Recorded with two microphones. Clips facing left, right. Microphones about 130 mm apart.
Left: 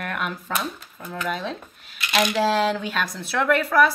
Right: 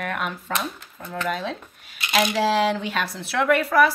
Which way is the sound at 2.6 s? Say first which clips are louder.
Right 1 dB; 5° right (ahead or behind).